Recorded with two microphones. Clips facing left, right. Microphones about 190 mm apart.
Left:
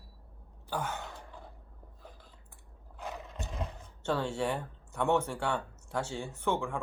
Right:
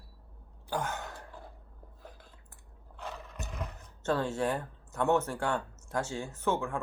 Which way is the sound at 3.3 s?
25° left (ahead or behind).